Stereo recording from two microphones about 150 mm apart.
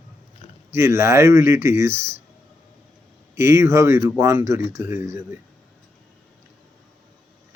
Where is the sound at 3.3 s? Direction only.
15° right (ahead or behind).